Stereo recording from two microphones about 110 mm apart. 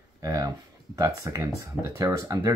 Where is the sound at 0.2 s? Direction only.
30° right (ahead or behind).